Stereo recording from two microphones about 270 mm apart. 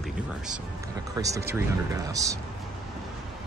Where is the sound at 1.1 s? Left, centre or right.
Centre.